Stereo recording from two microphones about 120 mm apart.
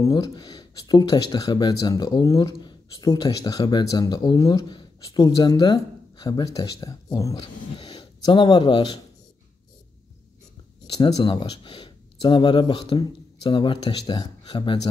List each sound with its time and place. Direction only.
0.0 s speech: 35° left (ahead or behind)
7.7 s speech: 40° left (ahead or behind)
11.3 s speech: 45° left (ahead or behind)